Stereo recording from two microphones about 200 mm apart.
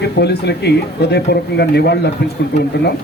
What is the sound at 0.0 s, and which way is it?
A man's voice, 55° left (ahead or behind).